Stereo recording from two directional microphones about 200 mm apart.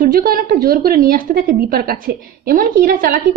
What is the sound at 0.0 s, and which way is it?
A woman's voice, 45° right (ahead or behind).